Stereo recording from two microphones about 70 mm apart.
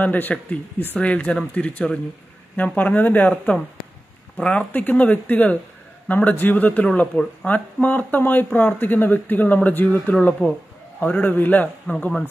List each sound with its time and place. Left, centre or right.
0.0 s speech: left